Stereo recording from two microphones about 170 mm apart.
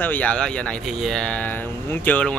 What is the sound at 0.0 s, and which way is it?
Speech, 10° left (ahead or behind).